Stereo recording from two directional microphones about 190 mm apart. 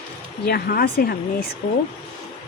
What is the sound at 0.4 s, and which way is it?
Speech, 55° left (ahead or behind).